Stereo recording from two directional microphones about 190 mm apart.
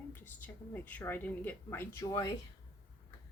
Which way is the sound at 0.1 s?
10° left (ahead or behind).